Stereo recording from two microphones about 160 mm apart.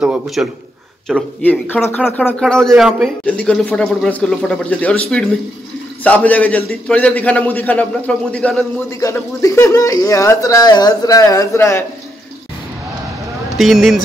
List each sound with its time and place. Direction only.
0.0 s a man's voice: 5° right (ahead or behind)
1.0 s a man's voice: 5° left (ahead or behind)
9.0 s speech: 20° left (ahead or behind)
13.6 s a man's voice: centre (ahead or behind)